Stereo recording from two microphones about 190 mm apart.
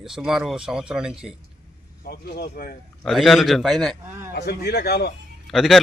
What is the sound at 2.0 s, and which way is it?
Speech, 55° left (ahead or behind).